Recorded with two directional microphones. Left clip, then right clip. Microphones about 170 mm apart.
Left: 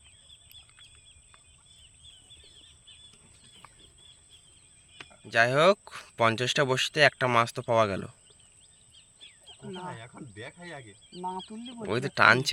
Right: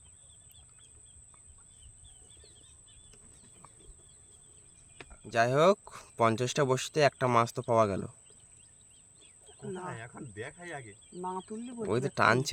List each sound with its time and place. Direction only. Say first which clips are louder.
5.3 s speech: left 3 dB; 5° right (ahead or behind)
9.8 s speech: left 1 dB; 60° left (ahead or behind)
11.6 s speech: right 1 dB; 35° left (ahead or behind)
11.9 s speech: left 5 dB; 5° right (ahead or behind)